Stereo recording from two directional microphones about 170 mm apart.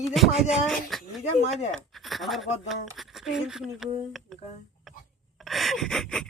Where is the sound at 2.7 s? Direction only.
Centre (ahead or behind).